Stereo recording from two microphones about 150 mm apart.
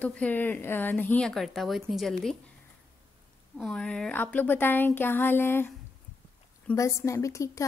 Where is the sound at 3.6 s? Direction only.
5° left (ahead or behind).